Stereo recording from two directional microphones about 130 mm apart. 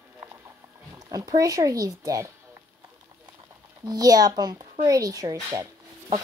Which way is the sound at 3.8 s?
30° right (ahead or behind).